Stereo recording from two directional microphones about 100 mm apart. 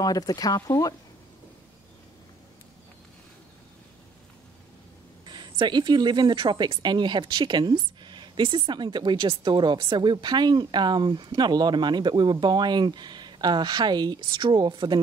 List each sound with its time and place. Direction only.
0.0 s speech: 40° left (ahead or behind)
5.2 s speech: 50° right (ahead or behind)